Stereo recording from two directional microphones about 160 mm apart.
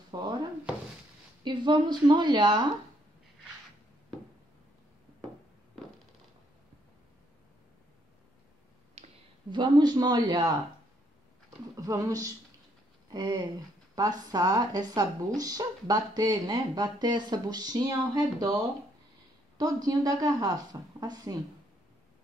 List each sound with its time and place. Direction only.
0.1 s speech: 25° right (ahead or behind)
1.4 s a woman's voice: 30° right (ahead or behind)
9.0 s a sound: 45° right (ahead or behind)
9.5 s speech: 25° right (ahead or behind)
11.7 s speech: 20° right (ahead or behind)
19.6 s speech: 25° right (ahead or behind)